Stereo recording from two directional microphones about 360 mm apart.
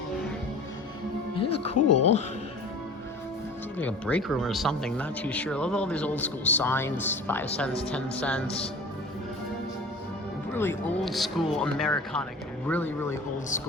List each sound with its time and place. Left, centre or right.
1.4 s music: centre
1.7 s speech: left
3.8 s speech: centre
10.5 s speech: centre